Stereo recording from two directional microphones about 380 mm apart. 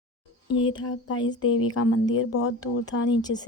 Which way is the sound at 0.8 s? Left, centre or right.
Left.